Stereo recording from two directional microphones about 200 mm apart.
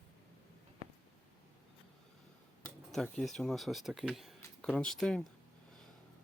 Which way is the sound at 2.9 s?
Centre (ahead or behind).